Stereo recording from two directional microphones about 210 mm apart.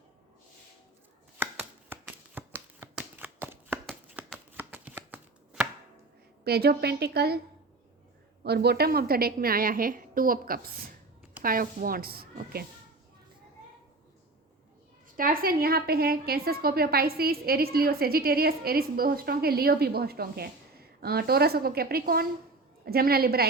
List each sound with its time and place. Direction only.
1.4 s shuffling cards: 10° right (ahead or behind)
6.4 s a woman's voice: 50° right (ahead or behind)
8.4 s a woman's voice: 50° right (ahead or behind)
15.1 s a woman's voice: 45° right (ahead or behind)